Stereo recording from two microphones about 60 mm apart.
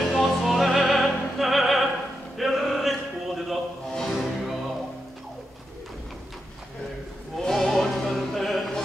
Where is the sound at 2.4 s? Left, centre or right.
Centre.